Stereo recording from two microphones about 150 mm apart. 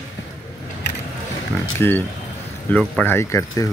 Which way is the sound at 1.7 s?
15° left (ahead or behind).